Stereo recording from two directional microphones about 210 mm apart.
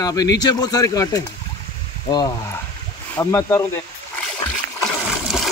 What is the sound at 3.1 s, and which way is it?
Speech, 10° left (ahead or behind).